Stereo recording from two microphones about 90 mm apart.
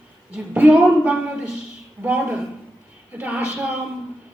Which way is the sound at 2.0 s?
15° right (ahead or behind).